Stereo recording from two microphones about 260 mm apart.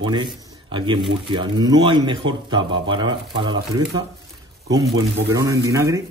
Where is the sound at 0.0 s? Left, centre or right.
Centre.